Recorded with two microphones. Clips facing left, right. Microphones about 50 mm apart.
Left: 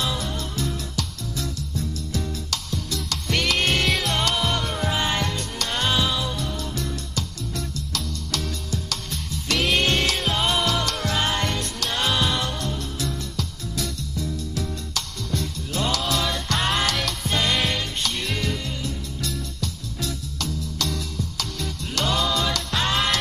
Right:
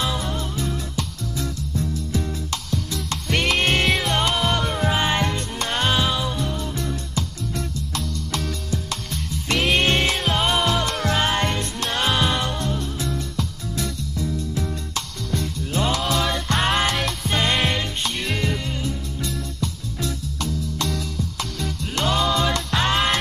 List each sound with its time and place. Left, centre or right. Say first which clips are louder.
0.0 s music: right 2 dB; right
3.5 s music: right 3 dB; centre
4.2 s music: right 2 dB; centre
9.6 s music: right 2 dB; centre
9.8 s music: right 2 dB; right
12.3 s music: right 2 dB; right
13.7 s music: right 2 dB; right
22.3 s music: right 3 dB; right
22.7 s music: right 2 dB; centre